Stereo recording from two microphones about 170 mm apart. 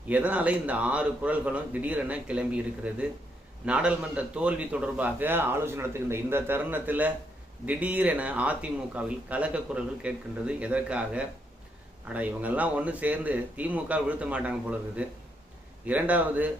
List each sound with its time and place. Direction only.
0.1 s a man's voice: 10° right (ahead or behind)